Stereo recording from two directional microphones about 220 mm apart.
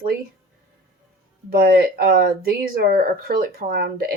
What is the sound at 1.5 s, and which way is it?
Speech, 40° right (ahead or behind).